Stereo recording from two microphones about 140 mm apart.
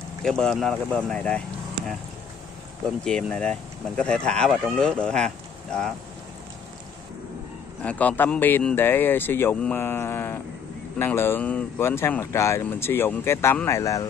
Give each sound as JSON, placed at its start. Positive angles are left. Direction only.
{"t": 0.2, "sound": "speech", "side_deg": 5}
{"t": 3.0, "sound": "speech", "side_deg": 5}
{"t": 7.8, "sound": "speech", "side_deg": 10}